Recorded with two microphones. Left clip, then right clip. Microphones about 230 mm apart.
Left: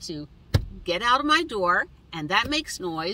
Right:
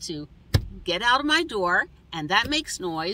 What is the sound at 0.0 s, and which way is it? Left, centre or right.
Speech, centre.